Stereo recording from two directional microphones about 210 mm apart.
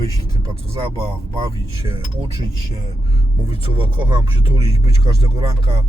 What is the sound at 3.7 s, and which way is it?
Speech, 25° right (ahead or behind).